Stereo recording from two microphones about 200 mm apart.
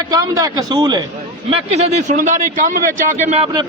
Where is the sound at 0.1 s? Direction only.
15° right (ahead or behind); by 3.5 s 35° right (ahead or behind).